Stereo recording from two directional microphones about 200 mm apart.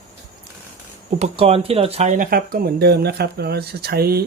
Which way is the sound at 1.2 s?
30° right (ahead or behind).